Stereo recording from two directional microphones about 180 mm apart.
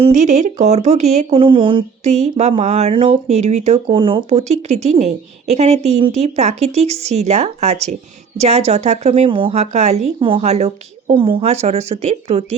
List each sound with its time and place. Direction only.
0.0 s speech: 40° right (ahead or behind)